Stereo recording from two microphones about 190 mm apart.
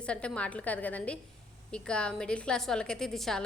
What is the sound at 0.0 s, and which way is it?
A woman's voice, 5° left (ahead or behind).